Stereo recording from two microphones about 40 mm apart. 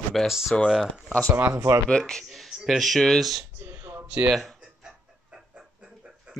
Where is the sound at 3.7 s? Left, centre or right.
Right.